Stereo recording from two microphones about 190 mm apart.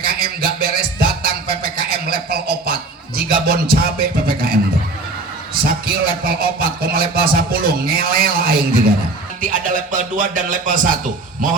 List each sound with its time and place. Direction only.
0.0 s music: 50° right (ahead or behind)
3.2 s a sound: 50° right (ahead or behind)
5.6 s a man's voice: 50° right (ahead or behind)